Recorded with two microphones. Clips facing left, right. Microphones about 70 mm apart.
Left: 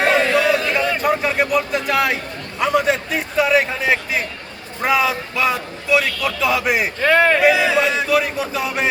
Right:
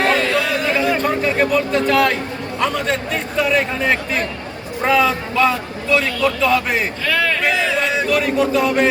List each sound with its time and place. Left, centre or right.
0.0 s a sound: centre
0.9 s speech: centre
7.0 s speech: left
7.3 s speech: centre